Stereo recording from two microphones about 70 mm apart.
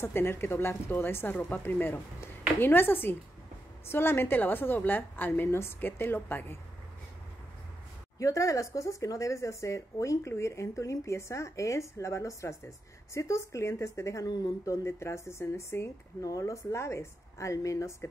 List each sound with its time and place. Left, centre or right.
0.0 s a woman's voice: left
8.2 s speech: left
16.3 s speech: left